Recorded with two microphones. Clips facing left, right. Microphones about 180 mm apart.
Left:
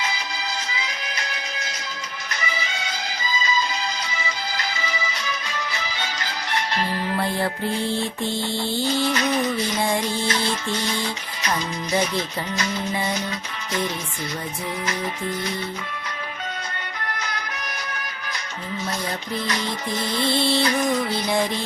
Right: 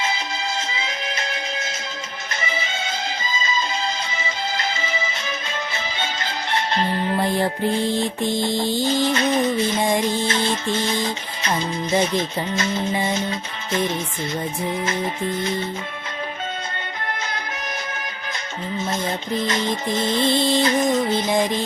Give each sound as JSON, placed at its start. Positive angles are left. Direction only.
{"t": 0.0, "sound": "music", "side_deg": -25}
{"t": 9.1, "sound": "music", "side_deg": -25}
{"t": 9.8, "sound": "music", "side_deg": -15}
{"t": 14.8, "sound": "music", "side_deg": -25}
{"t": 18.8, "sound": "music", "side_deg": -25}